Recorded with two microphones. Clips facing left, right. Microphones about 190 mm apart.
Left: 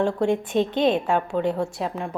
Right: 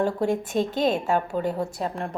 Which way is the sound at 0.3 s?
45° right (ahead or behind).